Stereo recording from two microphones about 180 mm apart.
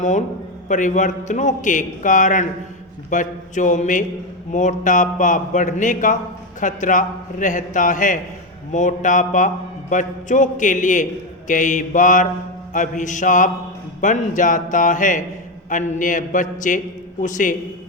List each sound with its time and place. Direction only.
0.0 s a man's voice: 45° left (ahead or behind)